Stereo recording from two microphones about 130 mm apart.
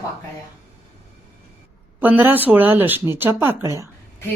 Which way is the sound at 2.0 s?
15° right (ahead or behind).